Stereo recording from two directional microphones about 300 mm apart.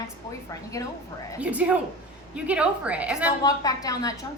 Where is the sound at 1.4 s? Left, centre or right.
Centre.